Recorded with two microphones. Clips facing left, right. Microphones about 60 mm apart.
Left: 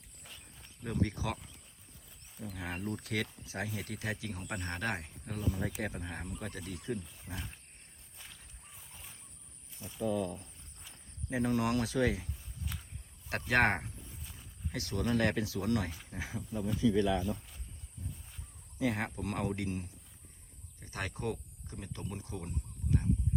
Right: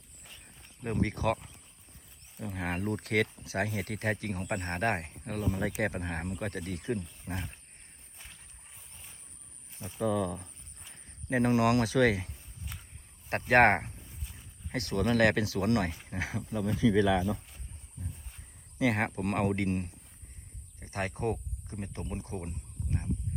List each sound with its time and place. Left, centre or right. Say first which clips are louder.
0.3 s a sound: right 1 dB; centre
0.8 s speech: right 4 dB; right
5.6 s speech: right 6 dB; right
7.0 s speech: right 5 dB; centre
8.7 s a sound: left 1 dB; centre
11.3 s speech: right 6 dB; right
12.7 s a sound: even; centre
13.5 s speech: right 7 dB; right
14.0 s a sound: right 1 dB; centre
14.7 s speech: right 4 dB; right
16.0 s speech: right 5 dB; right
18.8 s speech: right 5 dB; right
20.7 s speech: right 5 dB; right